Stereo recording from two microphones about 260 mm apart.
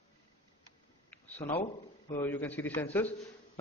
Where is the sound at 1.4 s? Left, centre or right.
Left.